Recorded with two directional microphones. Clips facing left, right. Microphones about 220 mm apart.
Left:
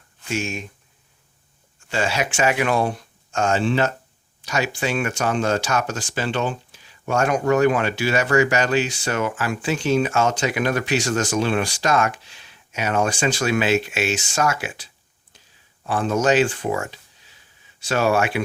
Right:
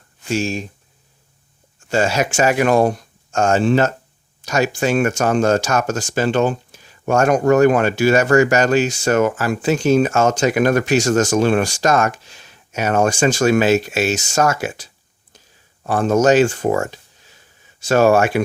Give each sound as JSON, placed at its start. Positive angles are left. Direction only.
{"t": 0.3, "sound": "speech", "side_deg": -35}
{"t": 1.9, "sound": "speech", "side_deg": -45}